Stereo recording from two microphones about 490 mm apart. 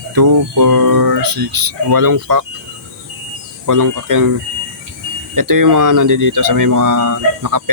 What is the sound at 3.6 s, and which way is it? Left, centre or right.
Speech, right.